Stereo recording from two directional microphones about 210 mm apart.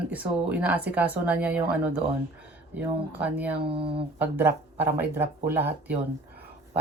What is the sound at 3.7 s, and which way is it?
Speech, 25° right (ahead or behind).